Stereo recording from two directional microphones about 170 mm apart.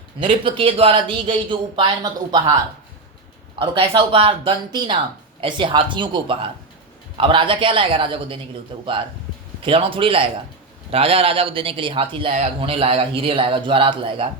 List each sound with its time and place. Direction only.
0.2 s speech: 30° right (ahead or behind)